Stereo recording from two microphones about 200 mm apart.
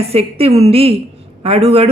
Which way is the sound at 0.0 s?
30° right (ahead or behind).